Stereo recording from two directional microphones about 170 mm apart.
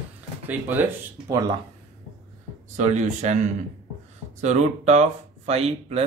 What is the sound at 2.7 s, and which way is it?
Speech, 45° right (ahead or behind).